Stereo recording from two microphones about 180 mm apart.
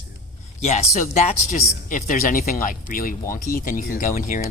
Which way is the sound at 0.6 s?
40° left (ahead or behind).